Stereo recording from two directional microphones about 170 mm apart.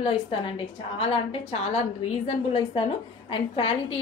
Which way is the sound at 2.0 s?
35° left (ahead or behind).